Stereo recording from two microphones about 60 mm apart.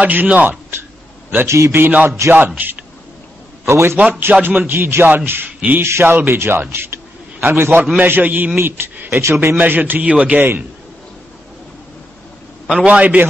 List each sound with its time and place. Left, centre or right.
0.0 s a man's voice: right
1.5 s speech: right
1.8 s a man's voice: right
2.0 s speech: right
2.3 s a man's voice: right
3.6 s a man's voice: right
4.0 s a man's voice: right
8.0 s a man's voice: right
12.7 s a man's voice: right